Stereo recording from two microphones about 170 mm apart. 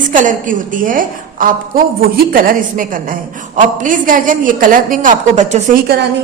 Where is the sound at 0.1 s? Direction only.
50° right (ahead or behind).